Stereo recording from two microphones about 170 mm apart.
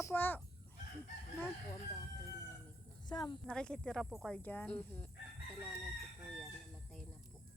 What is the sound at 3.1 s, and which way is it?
Speech, 25° left (ahead or behind).